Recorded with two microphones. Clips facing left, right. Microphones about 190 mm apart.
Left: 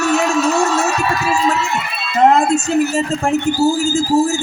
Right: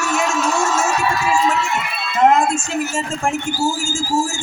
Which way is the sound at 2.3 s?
35° left (ahead or behind).